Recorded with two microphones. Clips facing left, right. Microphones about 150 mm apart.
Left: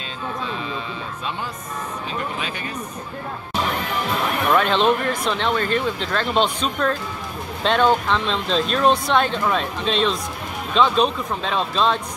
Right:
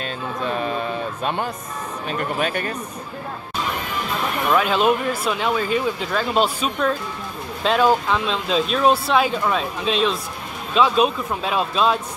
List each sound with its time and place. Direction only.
0.5 s sheep: 50° right (ahead or behind)
2.3 s speech: 50° right (ahead or behind)
4.5 s speech: 5° right (ahead or behind)